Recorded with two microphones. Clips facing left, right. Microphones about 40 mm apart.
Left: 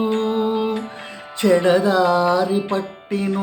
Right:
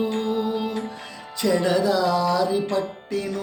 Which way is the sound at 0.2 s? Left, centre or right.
Left.